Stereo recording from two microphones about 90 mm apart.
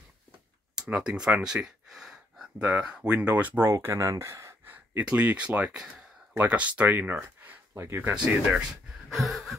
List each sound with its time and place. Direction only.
0.7 s speech: 10° right (ahead or behind)
3.6 s speech: 30° right (ahead or behind)
4.9 s speech: 15° right (ahead or behind)
7.4 s a sound: 25° right (ahead or behind)
8.1 s speech: 10° right (ahead or behind)